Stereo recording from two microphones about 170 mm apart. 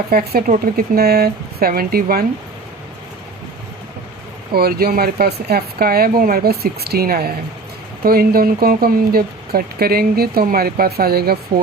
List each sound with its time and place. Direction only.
0.1 s speech: 60° right (ahead or behind)
4.5 s speech: 65° right (ahead or behind)